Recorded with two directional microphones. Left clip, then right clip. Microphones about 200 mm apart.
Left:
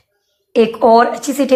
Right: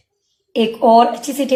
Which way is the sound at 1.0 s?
5° left (ahead or behind).